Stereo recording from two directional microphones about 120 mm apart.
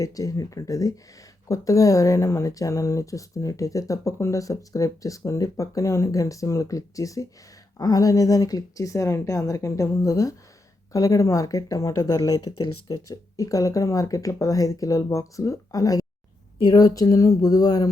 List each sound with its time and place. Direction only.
0.0 s speech: 30° left (ahead or behind)